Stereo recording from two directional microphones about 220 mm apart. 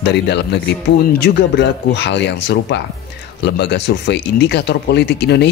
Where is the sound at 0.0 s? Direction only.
50° left (ahead or behind).